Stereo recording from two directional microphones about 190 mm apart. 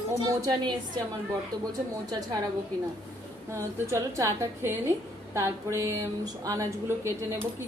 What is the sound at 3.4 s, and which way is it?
A woman's voice, 15° right (ahead or behind).